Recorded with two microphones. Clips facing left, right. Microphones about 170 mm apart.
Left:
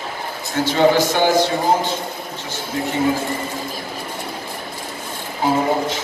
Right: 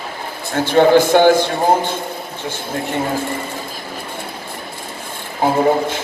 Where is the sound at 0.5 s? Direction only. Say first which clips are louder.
Right 4 dB; 55° right (ahead or behind).